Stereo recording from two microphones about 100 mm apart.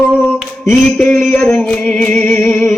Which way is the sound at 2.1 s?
25° left (ahead or behind).